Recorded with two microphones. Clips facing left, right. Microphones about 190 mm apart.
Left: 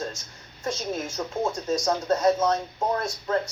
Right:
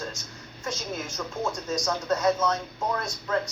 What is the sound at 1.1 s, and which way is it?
Speech, 30° left (ahead or behind).